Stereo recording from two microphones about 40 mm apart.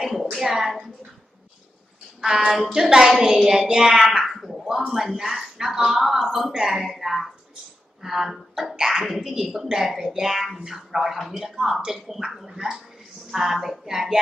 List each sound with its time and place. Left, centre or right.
0.1 s a sound: centre
2.2 s speech: centre
9.0 s speech: centre
9.7 s speech: right
10.2 s speech: centre